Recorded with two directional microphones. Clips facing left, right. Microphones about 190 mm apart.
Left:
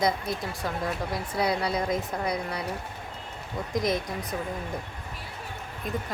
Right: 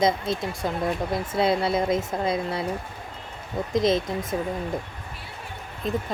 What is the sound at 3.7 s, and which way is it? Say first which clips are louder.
Speech: right 5 dB; 25° right (ahead or behind).